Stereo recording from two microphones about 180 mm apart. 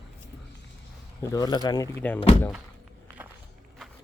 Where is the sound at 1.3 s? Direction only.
20° left (ahead or behind).